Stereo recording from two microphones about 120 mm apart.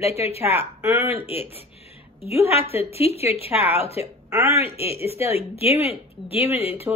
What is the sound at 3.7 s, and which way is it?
Speech, 55° left (ahead or behind).